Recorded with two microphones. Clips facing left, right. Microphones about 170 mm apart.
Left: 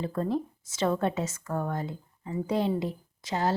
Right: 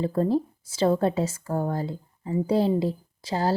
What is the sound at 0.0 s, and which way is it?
A woman's voice, 35° right (ahead or behind).